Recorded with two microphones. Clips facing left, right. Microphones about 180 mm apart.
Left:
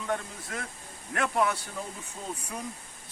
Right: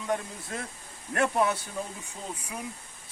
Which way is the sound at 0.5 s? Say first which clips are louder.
Right 1 dB; 25° right (ahead or behind).